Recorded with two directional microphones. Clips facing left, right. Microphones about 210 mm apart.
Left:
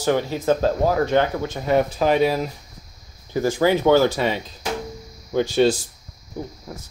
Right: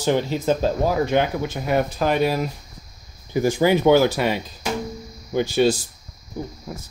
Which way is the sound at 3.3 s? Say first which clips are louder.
Right 1 dB; 15° right (ahead or behind).